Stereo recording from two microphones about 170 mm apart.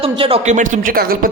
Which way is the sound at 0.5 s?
50° right (ahead or behind).